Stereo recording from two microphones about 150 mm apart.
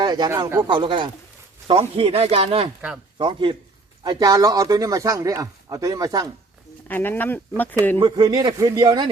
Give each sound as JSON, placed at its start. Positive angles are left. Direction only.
{"t": 0.0, "sound": "a sound", "side_deg": -30}
{"t": 0.7, "sound": "speech", "side_deg": -35}
{"t": 6.8, "sound": "speech", "side_deg": 15}
{"t": 7.9, "sound": "speech", "side_deg": -30}